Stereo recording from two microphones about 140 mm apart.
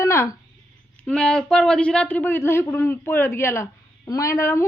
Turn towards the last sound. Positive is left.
turn(degrees=20)  # may be behind; listen again after turning